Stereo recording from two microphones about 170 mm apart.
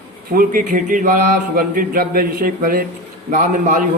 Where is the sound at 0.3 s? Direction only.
55° right (ahead or behind).